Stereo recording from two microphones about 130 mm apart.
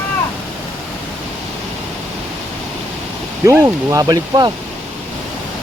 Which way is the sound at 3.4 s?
25° right (ahead or behind).